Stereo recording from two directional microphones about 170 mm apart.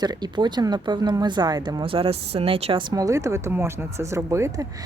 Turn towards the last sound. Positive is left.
turn(degrees=-20)  # may be behind; listen again after turning